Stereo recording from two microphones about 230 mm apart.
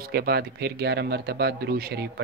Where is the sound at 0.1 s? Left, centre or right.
Right.